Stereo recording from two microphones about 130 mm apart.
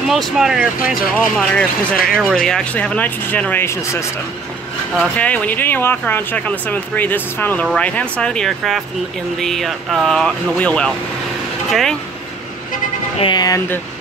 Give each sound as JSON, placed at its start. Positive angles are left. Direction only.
{"t": 0.1, "sound": "speech", "side_deg": 0}
{"t": 1.1, "sound": "speech", "side_deg": 10}
{"t": 2.0, "sound": "speech", "side_deg": -5}
{"t": 2.3, "sound": "speech", "side_deg": 5}
{"t": 4.9, "sound": "speech", "side_deg": 10}
{"t": 13.2, "sound": "speech", "side_deg": 35}